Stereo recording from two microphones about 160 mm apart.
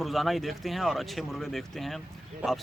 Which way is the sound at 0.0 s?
Centre (ahead or behind).